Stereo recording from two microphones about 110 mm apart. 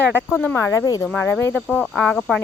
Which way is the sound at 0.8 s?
35° left (ahead or behind).